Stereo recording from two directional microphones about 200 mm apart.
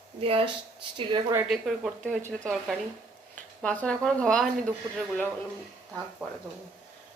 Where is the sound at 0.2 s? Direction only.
30° right (ahead or behind).